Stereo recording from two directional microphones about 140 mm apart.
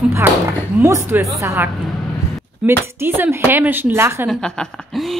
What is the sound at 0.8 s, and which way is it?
Speech, 20° right (ahead or behind).